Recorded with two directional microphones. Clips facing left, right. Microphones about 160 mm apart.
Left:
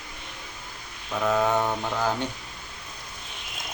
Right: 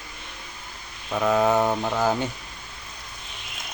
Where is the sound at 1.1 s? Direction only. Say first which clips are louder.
Right 3 dB; 10° right (ahead or behind).